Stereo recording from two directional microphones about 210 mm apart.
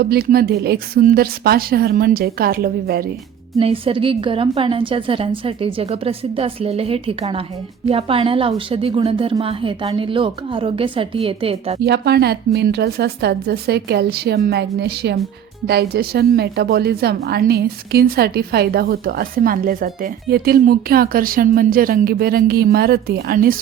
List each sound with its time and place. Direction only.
0.0 s a woman's voice: 45° right (ahead or behind)
3.6 s a woman's voice: 25° right (ahead or behind)
11.8 s a woman's voice: 50° right (ahead or behind)